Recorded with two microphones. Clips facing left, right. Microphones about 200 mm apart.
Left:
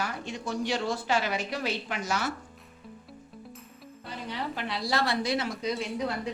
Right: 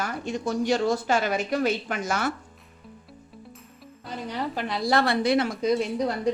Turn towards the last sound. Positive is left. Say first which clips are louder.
# right 6 dB
turn(degrees=-40)  # may be behind; listen again after turning